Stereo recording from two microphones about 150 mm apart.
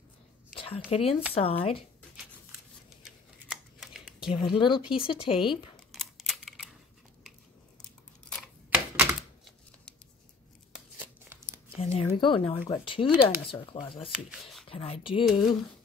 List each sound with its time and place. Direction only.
0.6 s a sound: 40° left (ahead or behind)
0.8 s speech: 40° left (ahead or behind)
3.0 s scissors: centre (ahead or behind)
4.2 s speech: 35° left (ahead or behind)
5.9 s camera: centre (ahead or behind)
8.6 s computer keyboard: 15° right (ahead or behind)
10.7 s a sound: 15° right (ahead or behind)
11.8 s speech: 40° left (ahead or behind)
14.0 s speech: 5° right (ahead or behind)
14.7 s speech: 40° left (ahead or behind)
15.2 s speech: centre (ahead or behind)